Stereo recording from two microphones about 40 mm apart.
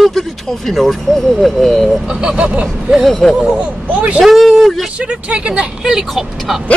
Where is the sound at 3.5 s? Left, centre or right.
Right.